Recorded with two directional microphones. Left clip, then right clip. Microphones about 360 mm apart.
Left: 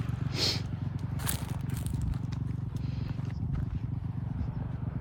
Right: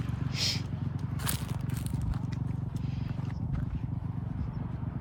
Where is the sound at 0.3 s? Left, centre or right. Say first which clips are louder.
Left 1 dB; centre.